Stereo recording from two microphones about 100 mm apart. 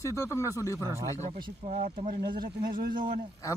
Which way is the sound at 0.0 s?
30° left (ahead or behind).